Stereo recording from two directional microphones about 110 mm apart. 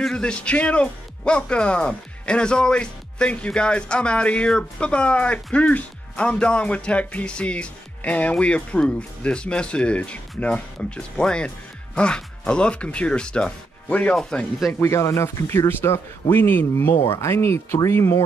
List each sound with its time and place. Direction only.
0.0 s speech: 10° left (ahead or behind)
14.1 s speech: centre (ahead or behind)
14.7 s speech: 25° left (ahead or behind)